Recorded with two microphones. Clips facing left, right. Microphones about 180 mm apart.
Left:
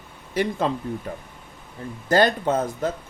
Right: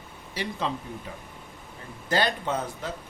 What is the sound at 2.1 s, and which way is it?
Speech, 45° left (ahead or behind).